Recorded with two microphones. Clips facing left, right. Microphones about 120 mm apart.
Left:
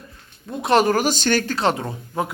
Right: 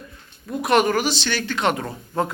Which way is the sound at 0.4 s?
25° left (ahead or behind).